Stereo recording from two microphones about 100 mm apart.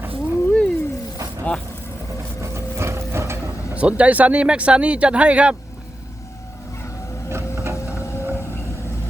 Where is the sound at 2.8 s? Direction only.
25° right (ahead or behind).